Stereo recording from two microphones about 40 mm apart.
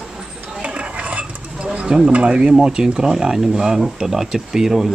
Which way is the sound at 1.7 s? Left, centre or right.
Right.